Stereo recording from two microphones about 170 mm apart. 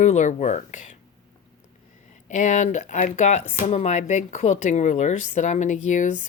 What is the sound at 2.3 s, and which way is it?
A woman's voice, 45° left (ahead or behind).